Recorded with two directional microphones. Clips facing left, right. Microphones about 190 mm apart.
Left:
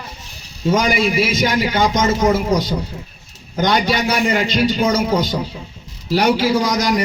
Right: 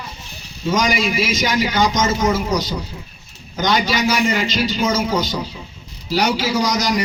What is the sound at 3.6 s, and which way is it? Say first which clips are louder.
A man's voice: left 2 dB; 55° left (ahead or behind).